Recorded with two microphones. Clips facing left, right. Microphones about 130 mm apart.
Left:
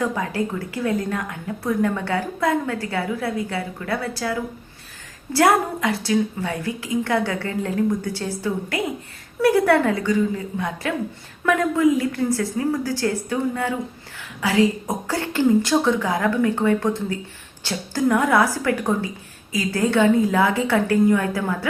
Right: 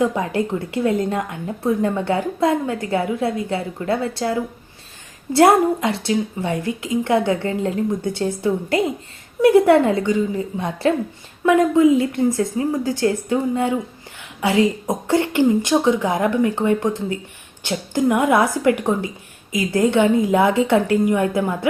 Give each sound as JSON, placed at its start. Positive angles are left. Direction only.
{"t": 0.0, "sound": "a woman's voice", "side_deg": -20}